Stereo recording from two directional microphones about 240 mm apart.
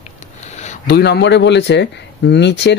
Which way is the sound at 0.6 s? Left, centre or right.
Left.